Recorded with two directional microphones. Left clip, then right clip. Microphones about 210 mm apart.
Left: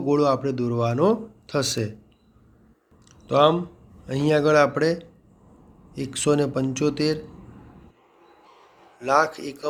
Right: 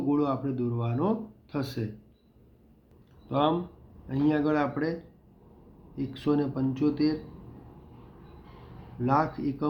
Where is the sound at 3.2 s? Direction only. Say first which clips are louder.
Left 8 dB; 40° left (ahead or behind).